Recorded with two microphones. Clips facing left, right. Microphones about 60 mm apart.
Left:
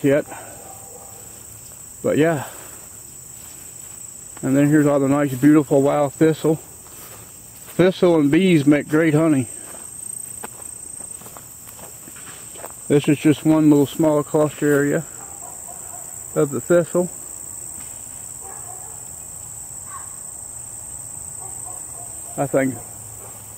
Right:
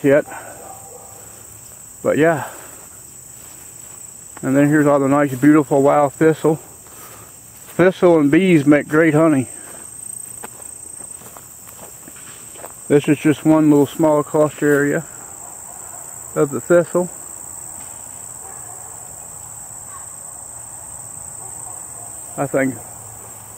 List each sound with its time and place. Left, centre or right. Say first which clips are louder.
0.1 s cricket: right 4 dB; centre
2.0 s cricket: right 3 dB; centre
4.4 s speech: right 2 dB; centre
4.8 s speech: right 3 dB; centre
5.3 s speech: left 1 dB; centre
7.7 s speech: right 3 dB; centre
9.2 s speech: right 3 dB; centre
9.6 s cricket: right 1 dB; centre
11.2 s walk: right 1 dB; centre
12.8 s speech: right 2 dB; centre
14.9 s insect: right 1 dB; centre
16.3 s speech: right 3 dB; centre
22.3 s cricket: right 1 dB; centre